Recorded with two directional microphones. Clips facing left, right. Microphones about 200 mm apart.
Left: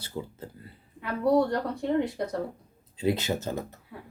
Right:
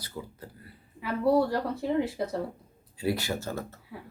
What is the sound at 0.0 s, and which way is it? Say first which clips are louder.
Speech: left 4 dB; 25° left (ahead or behind).